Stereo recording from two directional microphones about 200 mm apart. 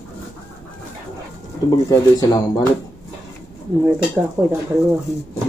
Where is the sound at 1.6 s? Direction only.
20° left (ahead or behind).